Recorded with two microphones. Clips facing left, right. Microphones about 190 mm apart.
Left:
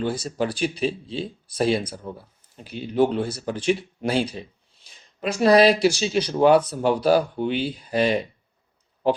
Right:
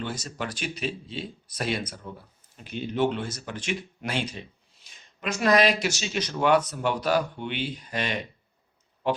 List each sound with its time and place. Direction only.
0.0 s speech: 35° left (ahead or behind)